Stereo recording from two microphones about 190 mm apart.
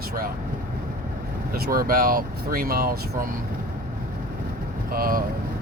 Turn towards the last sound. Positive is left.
turn(degrees=-50)  # may be behind; listen again after turning